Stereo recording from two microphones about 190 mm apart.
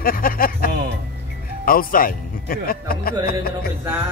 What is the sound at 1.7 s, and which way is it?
Speech, 50° left (ahead or behind).